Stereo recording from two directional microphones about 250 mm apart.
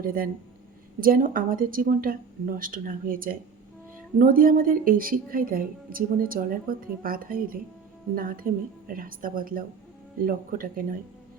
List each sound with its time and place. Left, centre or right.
0.0 s a woman's voice: right